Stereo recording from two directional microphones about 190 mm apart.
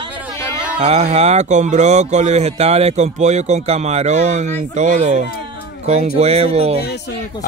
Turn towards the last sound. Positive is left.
turn(degrees=60)  # may be behind; listen again after turning